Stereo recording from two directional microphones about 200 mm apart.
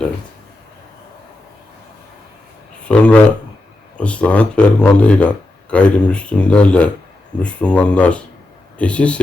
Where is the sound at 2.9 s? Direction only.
5° left (ahead or behind).